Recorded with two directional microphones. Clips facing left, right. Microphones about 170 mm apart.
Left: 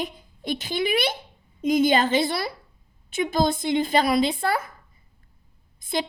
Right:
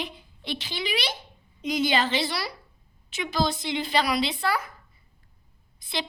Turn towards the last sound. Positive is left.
turn(degrees=50)  # may be behind; listen again after turning